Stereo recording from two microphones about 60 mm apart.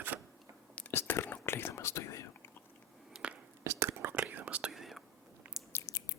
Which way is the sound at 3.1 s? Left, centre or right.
Centre.